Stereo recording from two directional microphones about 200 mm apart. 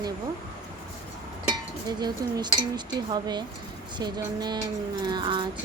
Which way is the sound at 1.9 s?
20° right (ahead or behind).